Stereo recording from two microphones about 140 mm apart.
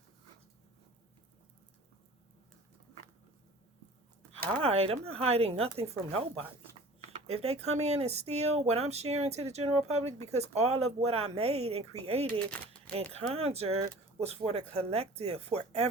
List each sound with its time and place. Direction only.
4.6 s speech: 45° right (ahead or behind)